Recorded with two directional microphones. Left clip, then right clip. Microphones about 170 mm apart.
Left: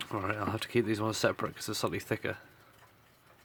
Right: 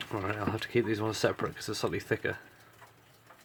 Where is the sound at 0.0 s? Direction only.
35° left (ahead or behind).